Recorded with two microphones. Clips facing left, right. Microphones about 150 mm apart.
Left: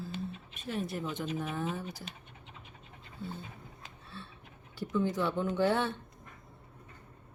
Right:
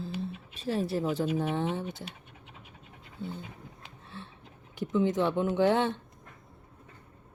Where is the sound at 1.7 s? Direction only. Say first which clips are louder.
Right 5 dB; 25° right (ahead or behind).